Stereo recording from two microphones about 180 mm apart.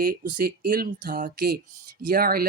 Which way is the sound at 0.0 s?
50° right (ahead or behind).